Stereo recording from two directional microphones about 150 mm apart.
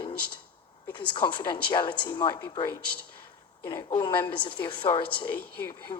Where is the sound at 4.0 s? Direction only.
30° left (ahead or behind).